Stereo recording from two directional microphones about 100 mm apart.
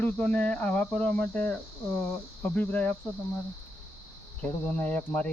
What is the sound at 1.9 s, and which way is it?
Speech, 25° left (ahead or behind).